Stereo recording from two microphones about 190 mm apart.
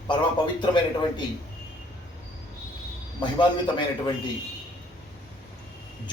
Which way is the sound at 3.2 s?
25° left (ahead or behind).